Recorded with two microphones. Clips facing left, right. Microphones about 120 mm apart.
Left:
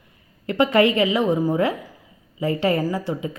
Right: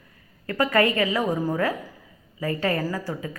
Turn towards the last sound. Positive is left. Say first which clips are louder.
# left 4 dB
turn(degrees=20)  # may be behind; listen again after turning